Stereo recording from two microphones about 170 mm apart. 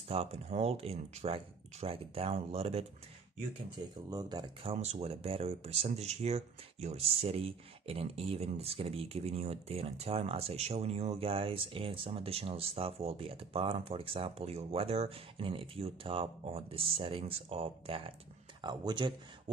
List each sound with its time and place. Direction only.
0.1 s speech: 35° right (ahead or behind)
4.1 s speech: 20° right (ahead or behind)
4.6 s speech: 35° right (ahead or behind)